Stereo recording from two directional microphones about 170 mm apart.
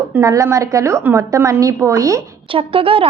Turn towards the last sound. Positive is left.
turn(degrees=-30)  # may be behind; listen again after turning